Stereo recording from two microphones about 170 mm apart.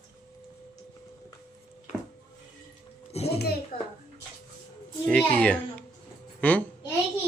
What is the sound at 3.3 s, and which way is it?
Speech, 70° left (ahead or behind).